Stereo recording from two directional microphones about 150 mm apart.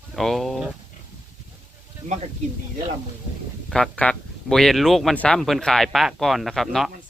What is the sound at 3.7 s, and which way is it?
Speech, 5° left (ahead or behind).